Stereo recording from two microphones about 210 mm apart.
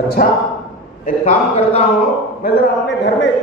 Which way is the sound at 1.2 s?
30° left (ahead or behind).